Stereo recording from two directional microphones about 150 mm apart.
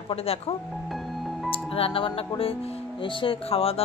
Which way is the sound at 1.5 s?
40° left (ahead or behind).